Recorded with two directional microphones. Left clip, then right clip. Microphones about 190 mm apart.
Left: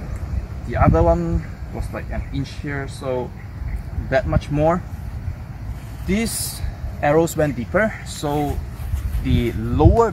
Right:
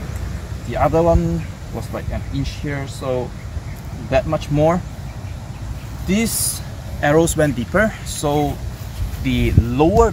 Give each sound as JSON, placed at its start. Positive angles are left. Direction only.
{"t": 0.7, "sound": "speech", "side_deg": -15}
{"t": 6.0, "sound": "speech", "side_deg": -10}